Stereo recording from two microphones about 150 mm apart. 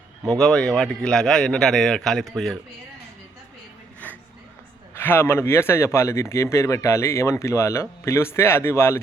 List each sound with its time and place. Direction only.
0.3 s a man's voice: 5° left (ahead or behind)
4.0 s a sound: 10° left (ahead or behind)
4.9 s a man's voice: 15° left (ahead or behind)